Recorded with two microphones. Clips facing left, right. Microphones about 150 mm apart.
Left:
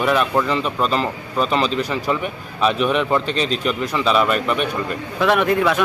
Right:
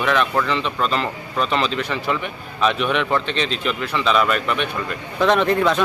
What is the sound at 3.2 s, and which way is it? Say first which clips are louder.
Speech: left 2 dB; 40° left (ahead or behind).